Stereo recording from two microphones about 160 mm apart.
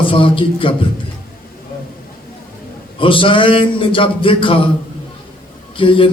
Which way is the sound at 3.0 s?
35° left (ahead or behind).